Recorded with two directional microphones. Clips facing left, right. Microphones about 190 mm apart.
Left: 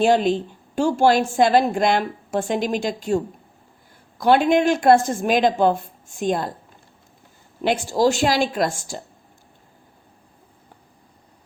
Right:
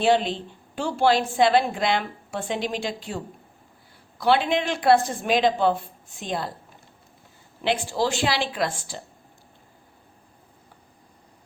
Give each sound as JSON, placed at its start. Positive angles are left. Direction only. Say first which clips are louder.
{"t": 0.0, "sound": "a woman's voice", "louder": "left 4 dB", "side_deg": 45}
{"t": 4.2, "sound": "a woman's voice", "louder": "left 5 dB", "side_deg": 45}
{"t": 7.6, "sound": "a woman's voice", "louder": "left 5 dB", "side_deg": 45}